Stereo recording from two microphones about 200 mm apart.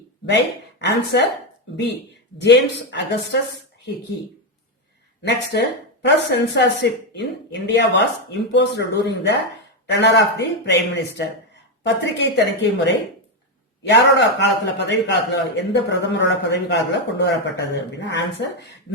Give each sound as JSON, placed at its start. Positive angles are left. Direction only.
{"t": 0.3, "sound": "speech", "side_deg": 60}
{"t": 5.2, "sound": "speech", "side_deg": 60}
{"t": 13.9, "sound": "speech", "side_deg": 60}